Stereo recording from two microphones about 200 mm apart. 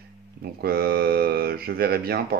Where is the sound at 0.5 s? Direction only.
50° right (ahead or behind).